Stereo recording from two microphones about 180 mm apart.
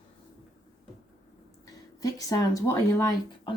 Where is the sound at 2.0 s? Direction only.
20° left (ahead or behind).